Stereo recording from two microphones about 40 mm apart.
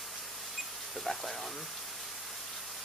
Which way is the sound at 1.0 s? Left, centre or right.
Centre.